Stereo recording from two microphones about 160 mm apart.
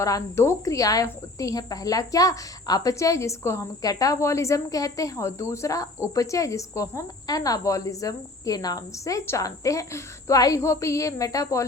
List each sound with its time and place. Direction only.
0.0 s speech: 20° left (ahead or behind)